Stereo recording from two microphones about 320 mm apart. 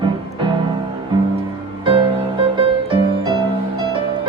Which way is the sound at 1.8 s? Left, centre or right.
Centre.